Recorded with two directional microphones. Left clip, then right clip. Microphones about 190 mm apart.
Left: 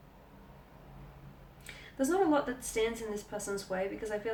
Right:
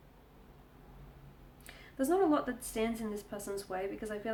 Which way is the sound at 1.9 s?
40° right (ahead or behind).